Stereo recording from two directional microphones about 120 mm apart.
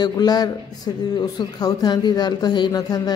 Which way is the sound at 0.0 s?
35° left (ahead or behind).